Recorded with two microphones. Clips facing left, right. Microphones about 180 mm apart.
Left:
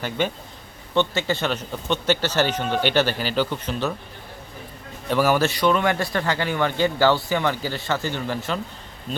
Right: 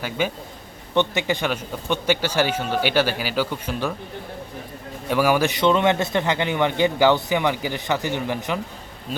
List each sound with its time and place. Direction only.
0.2 s a man's voice: 10° right (ahead or behind)
5.0 s a man's voice: 10° right (ahead or behind)